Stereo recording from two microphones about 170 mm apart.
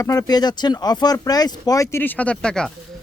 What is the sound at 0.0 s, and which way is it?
A man's voice, 20° left (ahead or behind).